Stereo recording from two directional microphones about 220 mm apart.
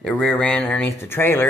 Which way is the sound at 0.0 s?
5° left (ahead or behind).